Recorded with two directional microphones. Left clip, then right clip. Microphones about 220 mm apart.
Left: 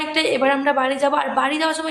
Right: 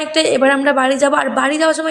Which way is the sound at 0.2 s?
20° right (ahead or behind).